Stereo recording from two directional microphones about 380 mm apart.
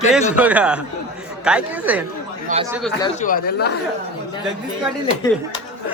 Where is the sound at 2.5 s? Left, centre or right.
Centre.